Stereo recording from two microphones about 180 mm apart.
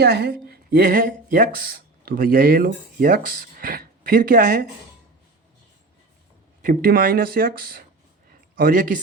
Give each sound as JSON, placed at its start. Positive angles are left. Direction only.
{"t": 0.0, "sound": "speech", "side_deg": -65}
{"t": 6.6, "sound": "speech", "side_deg": -55}